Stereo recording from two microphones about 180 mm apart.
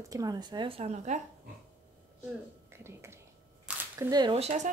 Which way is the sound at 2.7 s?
15° right (ahead or behind).